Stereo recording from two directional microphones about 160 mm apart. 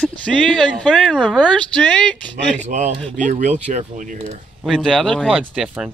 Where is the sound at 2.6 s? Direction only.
50° right (ahead or behind).